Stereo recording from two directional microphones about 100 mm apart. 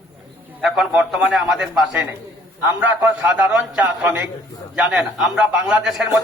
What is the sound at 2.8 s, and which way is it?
A man's voice, 15° right (ahead or behind).